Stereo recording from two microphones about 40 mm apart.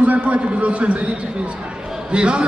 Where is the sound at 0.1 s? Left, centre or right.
Right.